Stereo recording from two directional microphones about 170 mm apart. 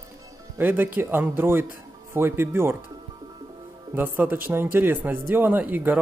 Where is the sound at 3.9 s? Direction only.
10° right (ahead or behind).